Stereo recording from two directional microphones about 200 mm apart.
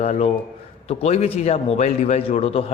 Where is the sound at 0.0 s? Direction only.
35° left (ahead or behind).